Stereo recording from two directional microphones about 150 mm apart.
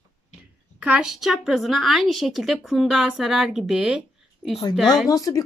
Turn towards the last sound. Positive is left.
turn(degrees=20)  # may be behind; listen again after turning